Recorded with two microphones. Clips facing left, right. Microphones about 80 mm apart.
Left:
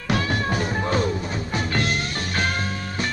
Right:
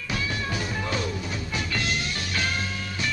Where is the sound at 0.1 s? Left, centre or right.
Left.